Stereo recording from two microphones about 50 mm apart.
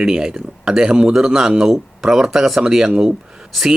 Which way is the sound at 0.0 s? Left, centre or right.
Centre.